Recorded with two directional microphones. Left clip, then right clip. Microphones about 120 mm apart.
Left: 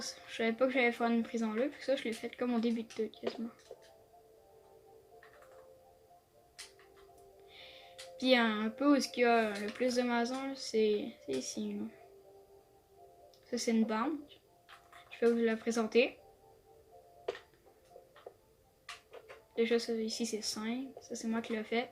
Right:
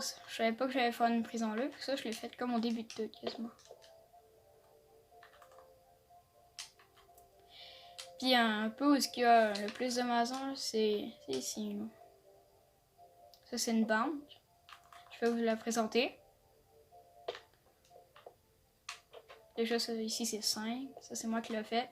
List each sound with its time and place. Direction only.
0.0 s speech: 55° right (ahead or behind)
7.5 s music: 55° right (ahead or behind)
8.2 s speech: 55° right (ahead or behind)
13.5 s speech: 55° right (ahead or behind)
19.5 s speech: 55° right (ahead or behind)